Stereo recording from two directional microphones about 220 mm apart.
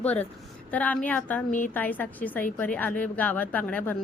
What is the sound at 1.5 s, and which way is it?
Speech, 35° left (ahead or behind).